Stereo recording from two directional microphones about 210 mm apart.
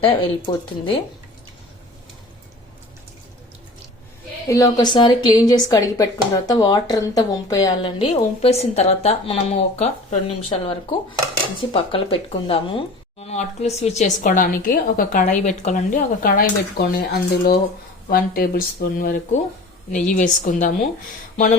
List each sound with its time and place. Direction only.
0.0 s a woman's voice: 25° left (ahead or behind)
4.4 s a woman's voice: 15° left (ahead or behind); by 20.7 s 40° left (ahead or behind)
21.3 s a sound: 40° left (ahead or behind)